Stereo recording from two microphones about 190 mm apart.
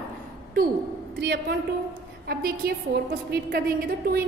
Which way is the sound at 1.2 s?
60° right (ahead or behind).